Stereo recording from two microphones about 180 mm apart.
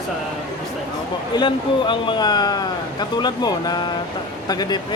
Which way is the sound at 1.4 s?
25° left (ahead or behind).